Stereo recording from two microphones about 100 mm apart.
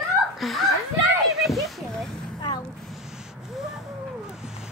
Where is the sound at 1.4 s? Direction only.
Centre (ahead or behind).